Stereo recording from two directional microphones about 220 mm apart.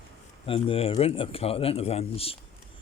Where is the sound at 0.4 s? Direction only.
25° left (ahead or behind).